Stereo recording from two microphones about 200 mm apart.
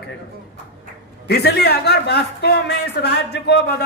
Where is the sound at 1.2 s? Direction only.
55° left (ahead or behind).